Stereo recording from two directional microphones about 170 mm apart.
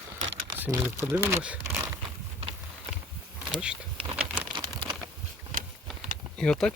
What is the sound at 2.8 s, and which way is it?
Wild animals, 10° right (ahead or behind).